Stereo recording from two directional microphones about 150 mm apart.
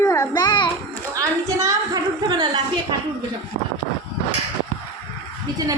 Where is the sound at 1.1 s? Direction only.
25° right (ahead or behind).